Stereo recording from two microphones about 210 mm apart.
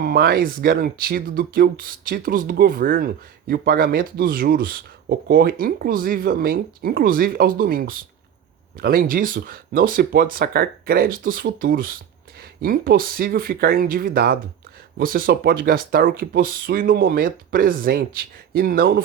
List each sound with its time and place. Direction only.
0.0 s speech: 45° right (ahead or behind)